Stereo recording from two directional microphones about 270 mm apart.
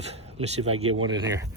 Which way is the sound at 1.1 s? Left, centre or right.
Centre.